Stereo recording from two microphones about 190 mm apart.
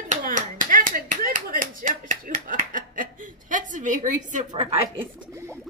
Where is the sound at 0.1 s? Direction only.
45° right (ahead or behind).